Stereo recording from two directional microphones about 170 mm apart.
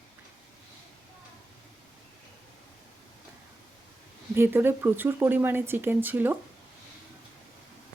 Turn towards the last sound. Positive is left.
turn(degrees=-10)  # may be behind; listen again after turning